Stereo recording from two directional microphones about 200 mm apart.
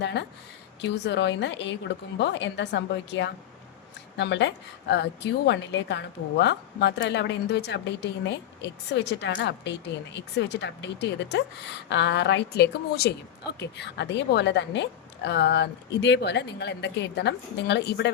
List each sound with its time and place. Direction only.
0.0 s a woman's voice: 60° left (ahead or behind)